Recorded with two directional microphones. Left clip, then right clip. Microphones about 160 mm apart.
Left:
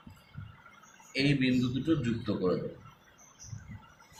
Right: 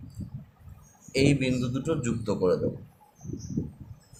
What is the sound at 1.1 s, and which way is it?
Speech, 90° right.